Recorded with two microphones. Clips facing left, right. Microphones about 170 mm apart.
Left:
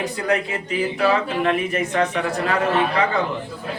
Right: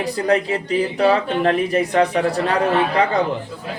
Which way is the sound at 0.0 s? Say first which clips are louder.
Right 4 dB; 35° right (ahead or behind).